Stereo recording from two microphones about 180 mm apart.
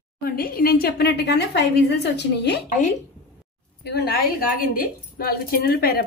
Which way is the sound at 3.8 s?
60° left (ahead or behind).